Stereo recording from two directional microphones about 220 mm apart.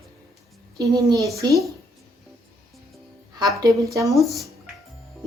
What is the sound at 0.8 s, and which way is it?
Speech, 15° right (ahead or behind).